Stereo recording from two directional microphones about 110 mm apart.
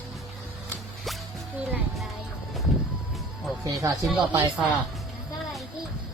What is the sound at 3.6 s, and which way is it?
Speech, 30° right (ahead or behind).